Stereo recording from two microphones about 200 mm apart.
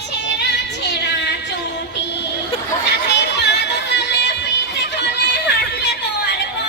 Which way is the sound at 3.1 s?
60° left (ahead or behind).